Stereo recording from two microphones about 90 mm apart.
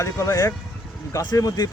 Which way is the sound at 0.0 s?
35° left (ahead or behind).